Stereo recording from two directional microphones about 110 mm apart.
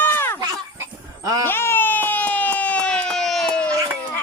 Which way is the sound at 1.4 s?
20° left (ahead or behind).